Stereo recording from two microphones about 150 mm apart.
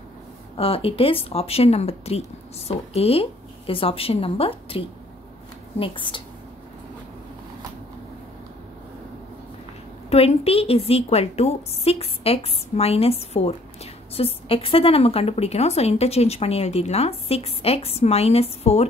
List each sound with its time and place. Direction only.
0.6 s a woman's voice: 40° left (ahead or behind)
10.0 s a woman's voice: 40° left (ahead or behind)